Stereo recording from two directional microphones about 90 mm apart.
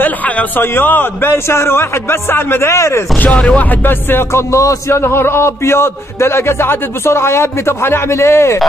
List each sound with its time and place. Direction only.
0.0 s speech: 20° left (ahead or behind)
3.2 s speech: 15° left (ahead or behind); by 8.5 s 30° left (ahead or behind)